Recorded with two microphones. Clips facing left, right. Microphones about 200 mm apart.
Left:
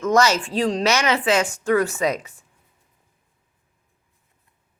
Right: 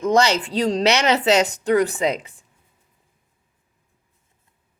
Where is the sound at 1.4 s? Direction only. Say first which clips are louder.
Right 3 dB; 35° right (ahead or behind).